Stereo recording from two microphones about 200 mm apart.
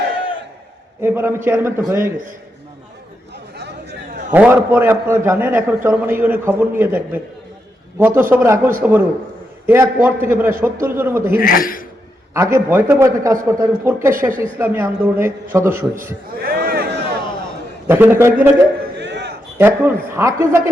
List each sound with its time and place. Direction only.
1.0 s a man's voice: 10° right (ahead or behind)
4.3 s a man's voice: 10° right (ahead or behind)
11.3 s speech: 45° left (ahead or behind)
12.3 s a man's voice: 15° right (ahead or behind)
16.4 s a sound: 50° right (ahead or behind)
17.8 s a man's voice: 10° right (ahead or behind)
18.9 s battle cry: 60° right (ahead or behind)
19.5 s a man's voice: 10° right (ahead or behind)